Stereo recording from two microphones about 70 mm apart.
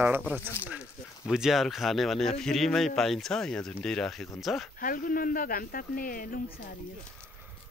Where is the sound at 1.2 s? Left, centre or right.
Centre.